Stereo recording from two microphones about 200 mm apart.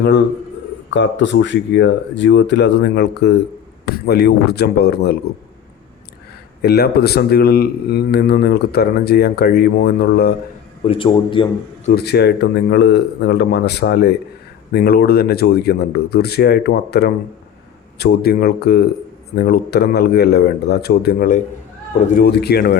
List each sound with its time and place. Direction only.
0.9 s speech: 65° left (ahead or behind)
6.6 s speech: 55° left (ahead or behind)
10.8 s a man's voice: 25° left (ahead or behind)
11.9 s speech: 55° left (ahead or behind)